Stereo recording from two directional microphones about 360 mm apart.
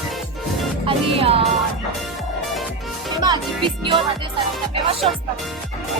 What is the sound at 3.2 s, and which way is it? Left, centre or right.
Music, centre.